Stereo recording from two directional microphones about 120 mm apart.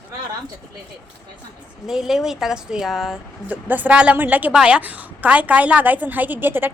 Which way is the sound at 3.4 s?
15° right (ahead or behind).